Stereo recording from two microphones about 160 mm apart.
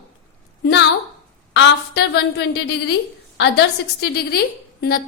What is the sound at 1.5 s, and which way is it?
A woman's voice, 90° left.